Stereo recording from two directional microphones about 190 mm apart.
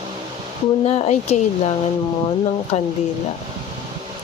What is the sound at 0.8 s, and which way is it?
Speech, 30° left (ahead or behind).